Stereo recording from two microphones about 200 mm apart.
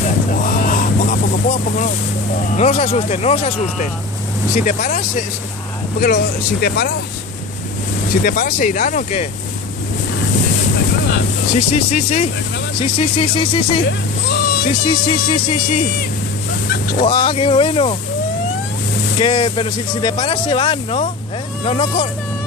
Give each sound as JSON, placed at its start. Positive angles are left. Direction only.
{"t": 0.3, "sound": "a sound", "side_deg": 40}
{"t": 2.5, "sound": "speech", "side_deg": 30}
{"t": 8.1, "sound": "speech", "side_deg": 45}
{"t": 11.7, "sound": "speech", "side_deg": 35}
{"t": 14.3, "sound": "a sound", "side_deg": 50}
{"t": 14.9, "sound": "speech", "side_deg": 25}
{"t": 16.7, "sound": "vehicle", "side_deg": 45}
{"t": 17.0, "sound": "speech", "side_deg": 25}
{"t": 19.1, "sound": "speech", "side_deg": 25}